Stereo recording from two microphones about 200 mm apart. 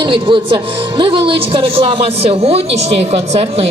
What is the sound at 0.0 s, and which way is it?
Speech, 25° right (ahead or behind).